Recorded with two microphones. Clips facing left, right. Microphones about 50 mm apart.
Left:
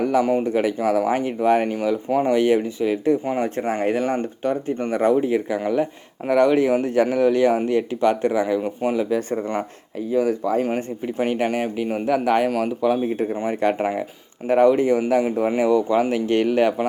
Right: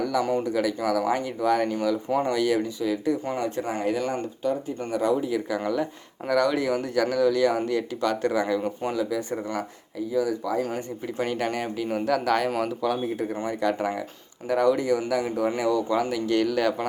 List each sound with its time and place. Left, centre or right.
0.2 s speech: centre
0.4 s speech: left
0.8 s speech: left
2.0 s speech: centre
2.3 s speech: left
3.2 s speech: centre
9.0 s speech: left
11.2 s speech: left